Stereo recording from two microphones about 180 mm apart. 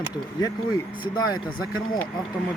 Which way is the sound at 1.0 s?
25° left (ahead or behind).